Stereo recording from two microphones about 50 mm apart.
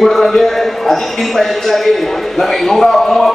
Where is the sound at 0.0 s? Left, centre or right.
Centre.